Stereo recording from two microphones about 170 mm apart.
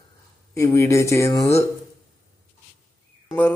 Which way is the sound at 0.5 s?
15° left (ahead or behind).